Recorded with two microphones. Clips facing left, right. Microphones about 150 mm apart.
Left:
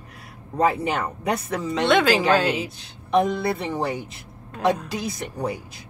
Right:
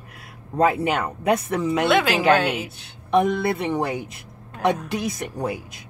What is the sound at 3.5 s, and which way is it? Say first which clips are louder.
Speech: right 2 dB; 20° right (ahead or behind).